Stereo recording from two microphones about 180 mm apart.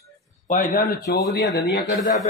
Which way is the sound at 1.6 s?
65° left (ahead or behind).